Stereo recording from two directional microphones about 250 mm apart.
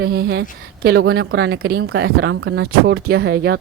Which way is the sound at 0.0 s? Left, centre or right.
Right.